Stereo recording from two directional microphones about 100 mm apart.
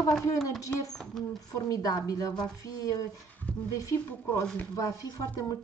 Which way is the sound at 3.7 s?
35° left (ahead or behind).